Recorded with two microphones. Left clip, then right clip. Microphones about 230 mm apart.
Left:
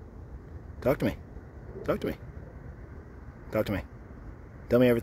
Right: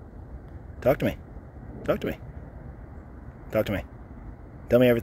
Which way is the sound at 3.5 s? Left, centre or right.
Centre.